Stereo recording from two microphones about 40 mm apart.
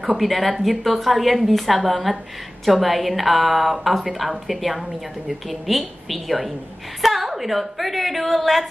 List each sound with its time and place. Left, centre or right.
0.2 s a woman's voice: centre